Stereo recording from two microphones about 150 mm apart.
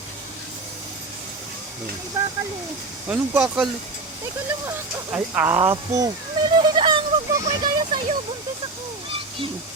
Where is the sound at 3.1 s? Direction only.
10° right (ahead or behind).